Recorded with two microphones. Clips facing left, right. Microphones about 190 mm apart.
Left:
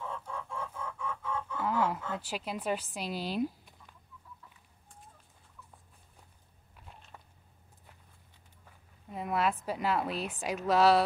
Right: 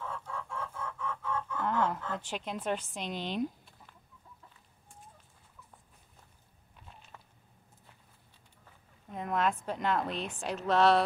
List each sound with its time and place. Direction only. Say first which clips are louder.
0.0 s chicken: even; 15° left (ahead or behind)
9.1 s a woman's voice: even; 5° left (ahead or behind)